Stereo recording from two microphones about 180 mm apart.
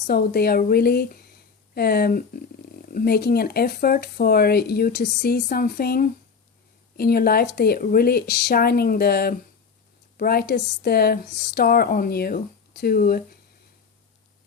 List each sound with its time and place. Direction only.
0.1 s speech: 60° left (ahead or behind)